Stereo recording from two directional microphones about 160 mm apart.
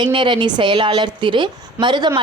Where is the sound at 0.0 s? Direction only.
30° right (ahead or behind).